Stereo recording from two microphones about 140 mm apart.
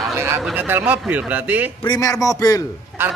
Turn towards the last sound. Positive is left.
turn(degrees=-15)  # may be behind; listen again after turning